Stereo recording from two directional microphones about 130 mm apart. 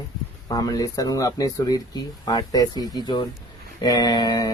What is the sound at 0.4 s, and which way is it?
Speech, 30° left (ahead or behind).